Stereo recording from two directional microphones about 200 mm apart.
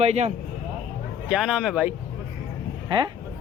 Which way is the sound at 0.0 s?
30° right (ahead or behind).